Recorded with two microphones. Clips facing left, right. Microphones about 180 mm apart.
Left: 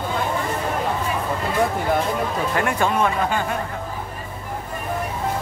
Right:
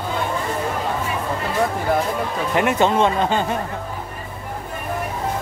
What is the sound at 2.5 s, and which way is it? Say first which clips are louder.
Speech: right 5 dB; 20° right (ahead or behind).